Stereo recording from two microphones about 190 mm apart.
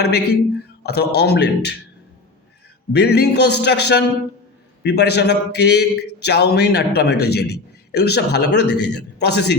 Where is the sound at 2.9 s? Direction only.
60° left (ahead or behind).